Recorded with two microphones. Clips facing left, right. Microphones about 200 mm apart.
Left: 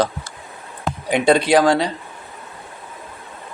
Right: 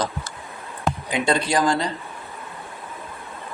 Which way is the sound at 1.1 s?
65° left (ahead or behind).